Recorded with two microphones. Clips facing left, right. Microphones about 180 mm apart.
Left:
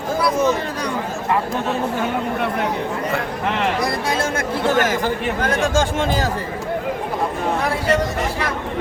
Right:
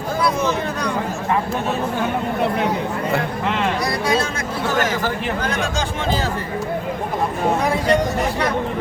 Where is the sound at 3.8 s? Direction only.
50° left (ahead or behind).